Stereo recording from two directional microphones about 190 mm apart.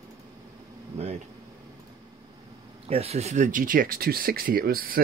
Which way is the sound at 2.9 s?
30° right (ahead or behind).